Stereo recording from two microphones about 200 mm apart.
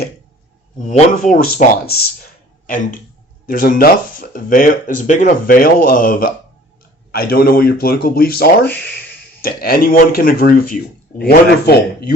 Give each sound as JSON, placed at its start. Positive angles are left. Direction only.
{"t": 0.9, "sound": "speech", "side_deg": 35}